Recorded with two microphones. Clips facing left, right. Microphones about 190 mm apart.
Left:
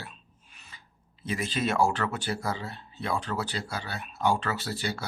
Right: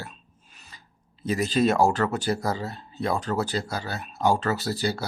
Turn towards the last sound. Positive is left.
turn(degrees=-35)  # may be behind; listen again after turning